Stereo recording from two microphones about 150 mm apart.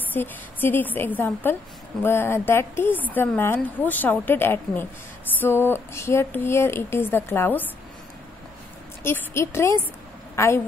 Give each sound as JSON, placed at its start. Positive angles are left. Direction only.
{"t": 0.1, "sound": "speech", "side_deg": 15}
{"t": 9.0, "sound": "a woman's voice", "side_deg": 15}